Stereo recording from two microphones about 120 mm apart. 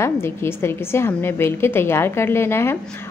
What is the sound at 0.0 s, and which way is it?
A woman's voice, 20° left (ahead or behind).